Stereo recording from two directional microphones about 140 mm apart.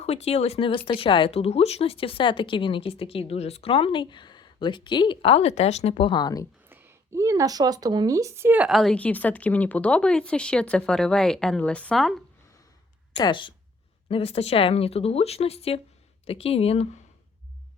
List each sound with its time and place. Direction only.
0.0 s speech: 50° left (ahead or behind)
5.9 s speech: 35° left (ahead or behind)
6.7 s speech: 15° right (ahead or behind)
8.7 s speech: 5° left (ahead or behind)
13.1 s speech: 35° left (ahead or behind)
14.1 s speech: 45° left (ahead or behind)